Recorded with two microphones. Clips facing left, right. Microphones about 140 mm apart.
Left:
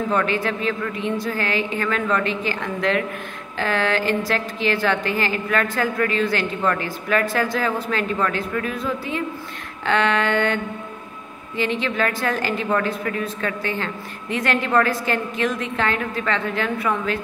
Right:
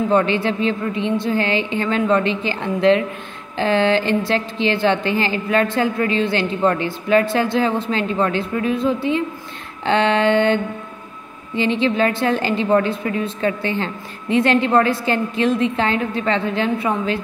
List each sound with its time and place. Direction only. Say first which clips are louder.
0.1 s a woman's voice: right 4 dB; 30° right (ahead or behind)